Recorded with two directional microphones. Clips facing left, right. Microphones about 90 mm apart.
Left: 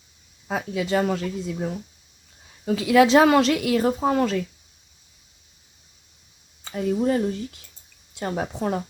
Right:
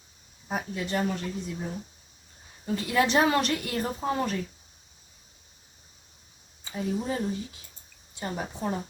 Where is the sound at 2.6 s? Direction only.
90° left.